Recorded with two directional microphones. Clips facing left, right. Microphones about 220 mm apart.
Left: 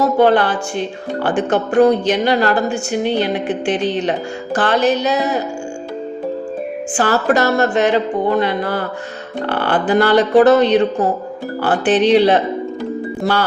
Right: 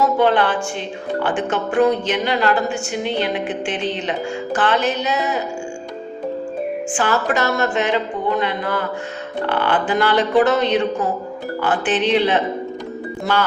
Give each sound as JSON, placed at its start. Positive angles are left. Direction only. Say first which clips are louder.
{"t": 0.0, "sound": "a woman's voice", "louder": "left 3 dB", "side_deg": 40}
{"t": 6.9, "sound": "a woman's voice", "louder": "left 6 dB", "side_deg": 40}